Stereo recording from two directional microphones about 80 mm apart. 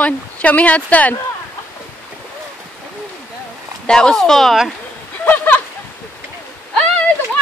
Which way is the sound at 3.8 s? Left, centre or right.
Centre.